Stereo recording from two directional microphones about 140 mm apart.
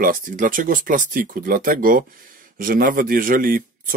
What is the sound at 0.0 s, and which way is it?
Speech, 75° right (ahead or behind).